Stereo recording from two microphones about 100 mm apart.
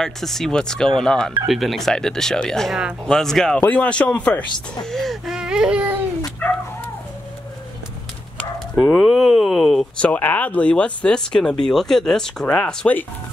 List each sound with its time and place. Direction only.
0.0 s speech: 5° left (ahead or behind)
4.8 s baby cry: centre (ahead or behind)
8.4 s bow-wow: 15° left (ahead or behind)
9.0 s speech: centre (ahead or behind)
9.9 s speech: 15° left (ahead or behind)